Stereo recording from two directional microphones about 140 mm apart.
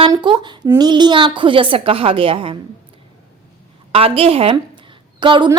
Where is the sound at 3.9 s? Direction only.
45° right (ahead or behind).